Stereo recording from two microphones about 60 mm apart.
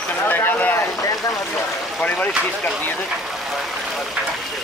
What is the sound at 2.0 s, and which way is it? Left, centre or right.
Speech, left.